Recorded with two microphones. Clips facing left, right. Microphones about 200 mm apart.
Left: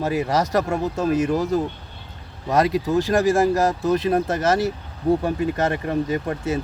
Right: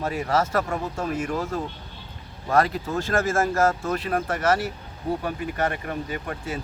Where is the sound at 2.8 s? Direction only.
15° left (ahead or behind).